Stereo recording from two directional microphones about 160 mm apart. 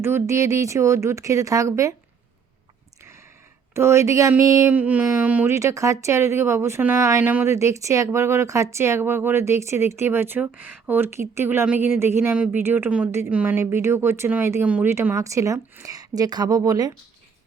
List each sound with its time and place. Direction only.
0.0 s speech: 15° right (ahead or behind)
3.8 s speech: 15° right (ahead or behind)